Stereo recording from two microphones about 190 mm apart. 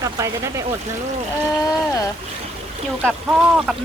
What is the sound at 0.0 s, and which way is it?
Speech, 15° right (ahead or behind).